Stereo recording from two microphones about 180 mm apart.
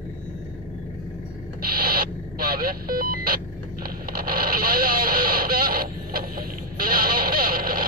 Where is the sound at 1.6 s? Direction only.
55° right (ahead or behind).